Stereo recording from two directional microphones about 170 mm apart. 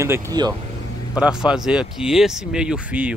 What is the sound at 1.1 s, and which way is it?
Speech, 5° right (ahead or behind).